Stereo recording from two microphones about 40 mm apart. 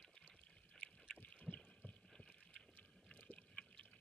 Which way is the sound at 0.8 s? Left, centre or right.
Left.